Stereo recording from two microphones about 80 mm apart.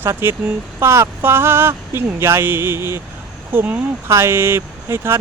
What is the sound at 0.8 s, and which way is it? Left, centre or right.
Speech, right.